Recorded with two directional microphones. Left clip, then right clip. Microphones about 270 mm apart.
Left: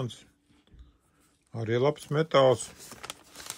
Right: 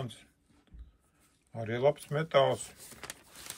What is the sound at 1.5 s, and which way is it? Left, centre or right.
Speech, left.